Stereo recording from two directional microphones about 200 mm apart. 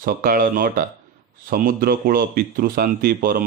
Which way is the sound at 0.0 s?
45° right (ahead or behind).